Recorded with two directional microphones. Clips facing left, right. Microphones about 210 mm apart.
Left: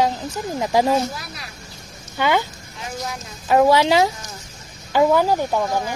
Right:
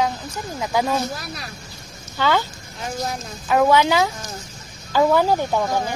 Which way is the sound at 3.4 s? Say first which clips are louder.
Left 1 dB; 30° left (ahead or behind).